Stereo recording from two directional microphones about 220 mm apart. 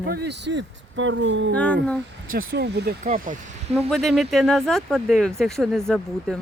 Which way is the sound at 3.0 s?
35° right (ahead or behind).